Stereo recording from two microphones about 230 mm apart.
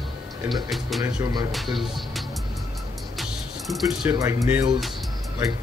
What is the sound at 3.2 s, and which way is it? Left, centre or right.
Speech, centre.